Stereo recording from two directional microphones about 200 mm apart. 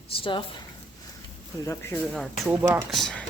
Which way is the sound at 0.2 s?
25° left (ahead or behind).